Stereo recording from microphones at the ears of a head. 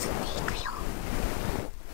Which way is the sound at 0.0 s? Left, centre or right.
Left.